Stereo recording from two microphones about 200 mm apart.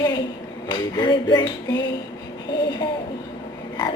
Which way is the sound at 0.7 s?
20° left (ahead or behind).